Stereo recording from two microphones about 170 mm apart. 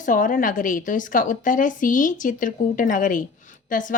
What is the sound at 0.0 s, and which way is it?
A woman's voice, 50° left (ahead or behind).